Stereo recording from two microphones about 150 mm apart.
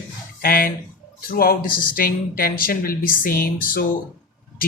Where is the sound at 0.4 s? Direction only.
75° left (ahead or behind).